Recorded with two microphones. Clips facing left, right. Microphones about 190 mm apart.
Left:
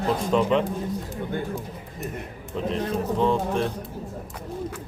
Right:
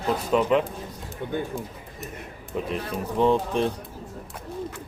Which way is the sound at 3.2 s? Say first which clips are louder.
Right 3 dB; 15° right (ahead or behind).